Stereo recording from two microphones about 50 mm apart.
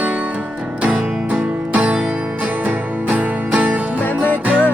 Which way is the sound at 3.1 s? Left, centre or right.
Right.